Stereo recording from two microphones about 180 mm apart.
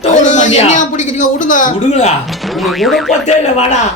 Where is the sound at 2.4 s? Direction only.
Centre (ahead or behind).